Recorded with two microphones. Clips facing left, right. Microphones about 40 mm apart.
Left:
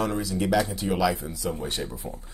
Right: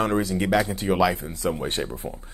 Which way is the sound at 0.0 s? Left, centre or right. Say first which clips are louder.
Right 3 dB; right.